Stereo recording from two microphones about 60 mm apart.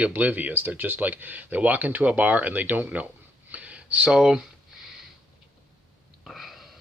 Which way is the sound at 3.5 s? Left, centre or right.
Right.